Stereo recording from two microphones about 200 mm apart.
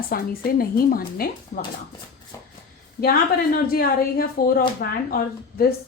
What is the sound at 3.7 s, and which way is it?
A woman's voice, 50° left (ahead or behind).